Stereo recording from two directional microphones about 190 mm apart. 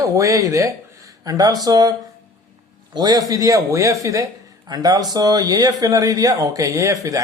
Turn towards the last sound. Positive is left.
turn(degrees=-15)  # may be behind; listen again after turning